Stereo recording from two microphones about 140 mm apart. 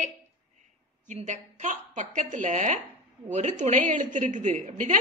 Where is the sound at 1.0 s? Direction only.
60° right (ahead or behind).